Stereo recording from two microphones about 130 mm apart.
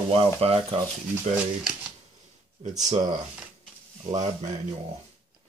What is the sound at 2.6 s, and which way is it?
Speech, 65° right (ahead or behind).